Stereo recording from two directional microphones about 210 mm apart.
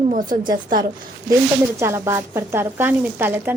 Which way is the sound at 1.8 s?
10° right (ahead or behind).